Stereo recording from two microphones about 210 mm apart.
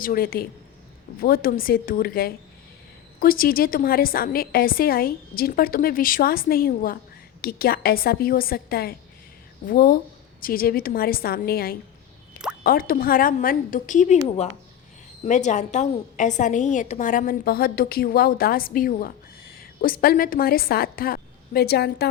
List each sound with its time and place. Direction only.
0.0 s a woman's voice: 45° left (ahead or behind)